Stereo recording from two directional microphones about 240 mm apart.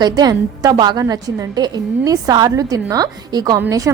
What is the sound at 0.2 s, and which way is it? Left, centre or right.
A woman's voice, centre.